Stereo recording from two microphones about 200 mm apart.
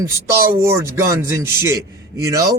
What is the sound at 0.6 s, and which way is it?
Speech, 15° right (ahead or behind).